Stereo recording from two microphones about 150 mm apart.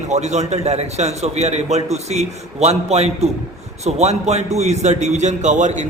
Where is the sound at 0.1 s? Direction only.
50° right (ahead or behind).